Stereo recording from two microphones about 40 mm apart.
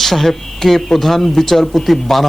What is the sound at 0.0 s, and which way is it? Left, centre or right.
Speech, centre.